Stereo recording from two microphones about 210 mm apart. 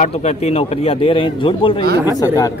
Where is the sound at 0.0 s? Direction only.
30° left (ahead or behind); by 2.5 s 15° left (ahead or behind).